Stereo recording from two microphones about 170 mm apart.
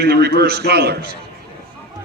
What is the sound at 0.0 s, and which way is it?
Speech, 70° right (ahead or behind).